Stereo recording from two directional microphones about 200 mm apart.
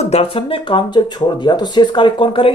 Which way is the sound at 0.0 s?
30° left (ahead or behind).